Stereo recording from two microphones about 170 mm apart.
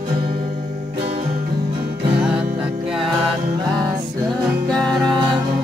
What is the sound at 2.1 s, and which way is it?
Music, 5° right (ahead or behind).